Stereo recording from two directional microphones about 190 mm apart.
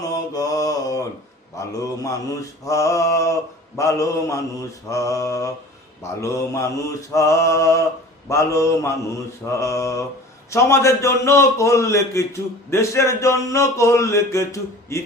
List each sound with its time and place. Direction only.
0.3 s mantra: 20° left (ahead or behind)
1.5 s a man's voice: 15° left (ahead or behind)